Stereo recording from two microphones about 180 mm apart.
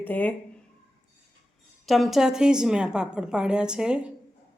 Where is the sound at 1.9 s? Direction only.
Centre (ahead or behind).